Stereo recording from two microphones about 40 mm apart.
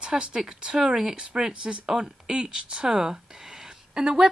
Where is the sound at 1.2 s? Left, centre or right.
Right.